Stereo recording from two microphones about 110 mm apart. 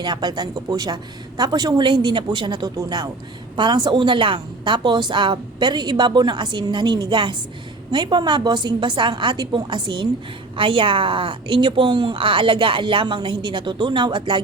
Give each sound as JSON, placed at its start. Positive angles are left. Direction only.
{"t": 0.0, "sound": "a woman's voice", "side_deg": -40}